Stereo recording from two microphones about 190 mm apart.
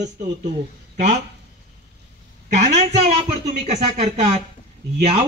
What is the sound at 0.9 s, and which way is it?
Speech, 40° right (ahead or behind).